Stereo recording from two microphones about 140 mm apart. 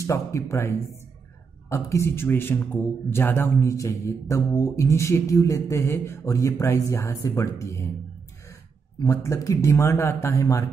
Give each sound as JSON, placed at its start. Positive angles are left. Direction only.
{"t": 0.0, "sound": "a man's voice", "side_deg": 20}
{"t": 9.0, "sound": "a man's voice", "side_deg": 20}